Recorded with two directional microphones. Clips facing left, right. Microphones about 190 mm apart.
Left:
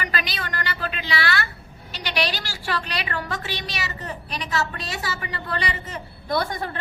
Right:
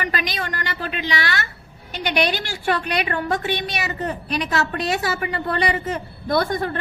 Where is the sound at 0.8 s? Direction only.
40° left (ahead or behind).